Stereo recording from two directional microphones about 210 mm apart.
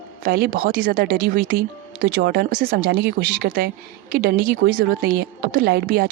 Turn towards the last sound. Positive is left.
turn(degrees=-50)  # may be behind; listen again after turning